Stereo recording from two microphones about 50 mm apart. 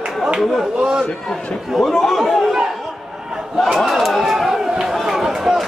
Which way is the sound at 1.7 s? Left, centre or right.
Centre.